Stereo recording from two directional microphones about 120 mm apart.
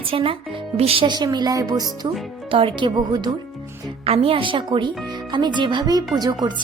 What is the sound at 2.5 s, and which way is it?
Speech, 50° right (ahead or behind).